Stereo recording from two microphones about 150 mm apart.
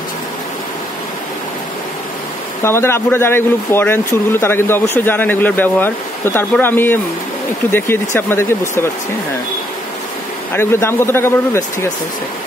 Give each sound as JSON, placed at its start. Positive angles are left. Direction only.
{"t": 2.6, "sound": "speech", "side_deg": 15}
{"t": 10.5, "sound": "speech", "side_deg": 15}